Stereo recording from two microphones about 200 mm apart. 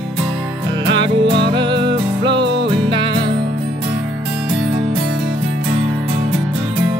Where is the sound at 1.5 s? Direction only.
25° right (ahead or behind).